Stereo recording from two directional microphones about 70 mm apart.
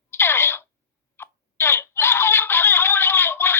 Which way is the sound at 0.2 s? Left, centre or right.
Left.